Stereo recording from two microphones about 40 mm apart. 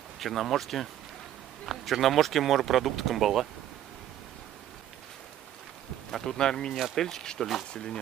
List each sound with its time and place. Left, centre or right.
0.2 s speech: centre
6.2 s speech: centre
7.7 s speech: left